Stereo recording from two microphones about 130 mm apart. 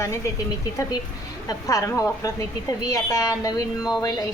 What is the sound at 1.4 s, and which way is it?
A woman's voice, 25° left (ahead or behind).